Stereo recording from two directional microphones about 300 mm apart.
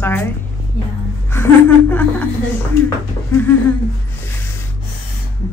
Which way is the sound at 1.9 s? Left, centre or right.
Centre.